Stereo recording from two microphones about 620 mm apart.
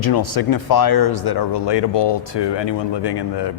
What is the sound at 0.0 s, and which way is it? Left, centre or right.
Speech, left.